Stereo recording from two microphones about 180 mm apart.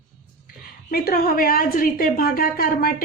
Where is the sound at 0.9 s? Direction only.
55° left (ahead or behind).